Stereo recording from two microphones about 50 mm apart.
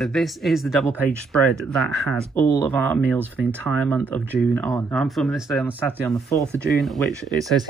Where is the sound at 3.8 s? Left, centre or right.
Left.